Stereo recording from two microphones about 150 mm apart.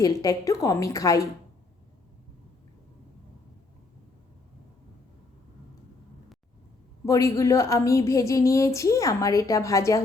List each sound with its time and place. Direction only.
0.0 s a woman's voice: 20° left (ahead or behind)
7.0 s a woman's voice: 20° left (ahead or behind)